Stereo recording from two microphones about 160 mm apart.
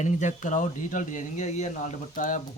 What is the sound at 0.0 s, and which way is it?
A man's voice, 50° left (ahead or behind).